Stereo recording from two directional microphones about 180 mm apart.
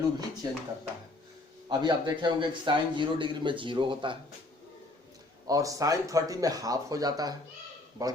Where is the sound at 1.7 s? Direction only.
25° right (ahead or behind).